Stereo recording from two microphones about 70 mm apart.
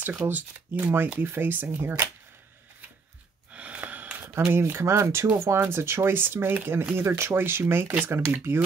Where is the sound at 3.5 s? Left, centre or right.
Centre; by 5.3 s right.